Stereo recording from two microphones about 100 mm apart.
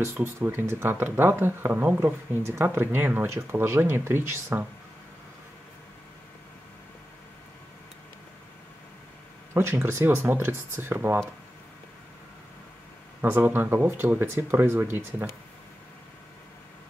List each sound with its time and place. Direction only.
0.0 s speech: 25° right (ahead or behind)
9.5 s speech: 25° right (ahead or behind)
13.2 s speech: 20° right (ahead or behind)